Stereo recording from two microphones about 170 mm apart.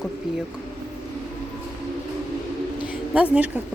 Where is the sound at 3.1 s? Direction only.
10° right (ahead or behind).